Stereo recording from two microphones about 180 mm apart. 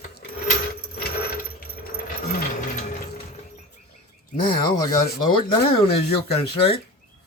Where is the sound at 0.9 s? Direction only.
60° left (ahead or behind).